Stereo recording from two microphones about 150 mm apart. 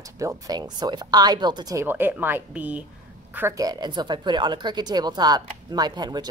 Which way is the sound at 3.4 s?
20° right (ahead or behind).